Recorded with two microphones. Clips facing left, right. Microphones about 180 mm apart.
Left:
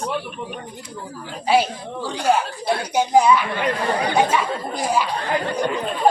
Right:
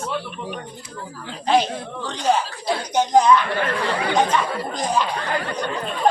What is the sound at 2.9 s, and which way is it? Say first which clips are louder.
Speech: even; 10° left (ahead or behind).